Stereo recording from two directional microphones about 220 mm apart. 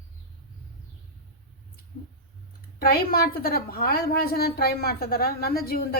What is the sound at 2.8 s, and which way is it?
A woman's voice, 45° left (ahead or behind).